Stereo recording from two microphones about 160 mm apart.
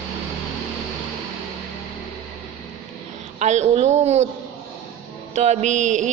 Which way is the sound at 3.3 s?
45° right (ahead or behind).